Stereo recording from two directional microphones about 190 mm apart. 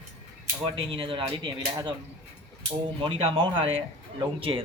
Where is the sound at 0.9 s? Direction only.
25° right (ahead or behind).